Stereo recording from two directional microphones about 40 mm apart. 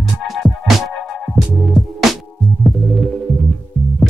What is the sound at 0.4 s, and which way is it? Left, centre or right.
Music, centre.